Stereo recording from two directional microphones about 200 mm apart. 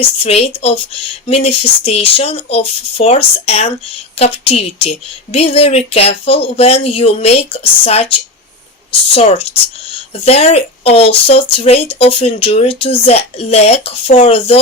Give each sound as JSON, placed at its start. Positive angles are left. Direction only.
{"t": 0.0, "sound": "speech", "side_deg": 30}
{"t": 9.1, "sound": "speech", "side_deg": 30}